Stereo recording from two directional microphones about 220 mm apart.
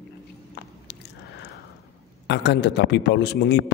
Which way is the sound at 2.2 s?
50° left (ahead or behind).